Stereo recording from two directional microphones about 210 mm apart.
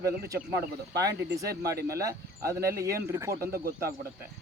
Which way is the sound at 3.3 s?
45° right (ahead or behind).